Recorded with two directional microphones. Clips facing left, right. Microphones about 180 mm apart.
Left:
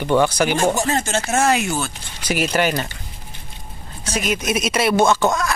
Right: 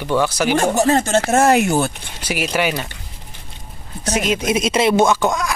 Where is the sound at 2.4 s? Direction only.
5° right (ahead or behind).